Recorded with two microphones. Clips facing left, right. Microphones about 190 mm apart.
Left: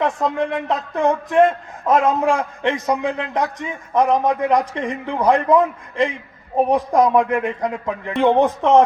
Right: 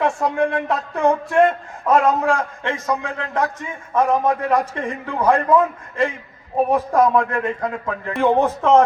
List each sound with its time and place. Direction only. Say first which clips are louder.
0.0 s a man's voice: right 1 dB; 20° left (ahead or behind)